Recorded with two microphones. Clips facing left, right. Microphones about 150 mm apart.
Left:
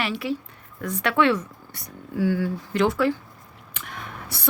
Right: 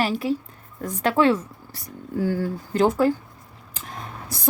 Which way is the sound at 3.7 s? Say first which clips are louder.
Right 1 dB; 35° right (ahead or behind).